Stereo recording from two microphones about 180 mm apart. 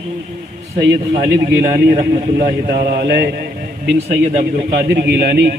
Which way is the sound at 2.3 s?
60° right (ahead or behind).